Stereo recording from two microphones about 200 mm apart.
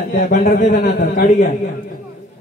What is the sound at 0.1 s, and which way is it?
A man's voice, 40° left (ahead or behind).